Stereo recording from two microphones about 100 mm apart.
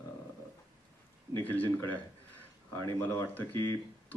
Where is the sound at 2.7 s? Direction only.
25° left (ahead or behind).